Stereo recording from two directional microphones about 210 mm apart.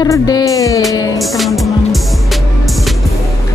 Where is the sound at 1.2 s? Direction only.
Centre (ahead or behind).